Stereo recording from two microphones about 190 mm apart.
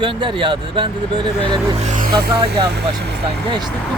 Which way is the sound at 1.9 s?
45° right (ahead or behind).